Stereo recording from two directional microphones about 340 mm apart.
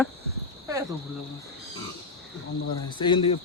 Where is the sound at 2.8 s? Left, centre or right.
Centre.